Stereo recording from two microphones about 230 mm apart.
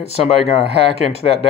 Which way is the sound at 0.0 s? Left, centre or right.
Left.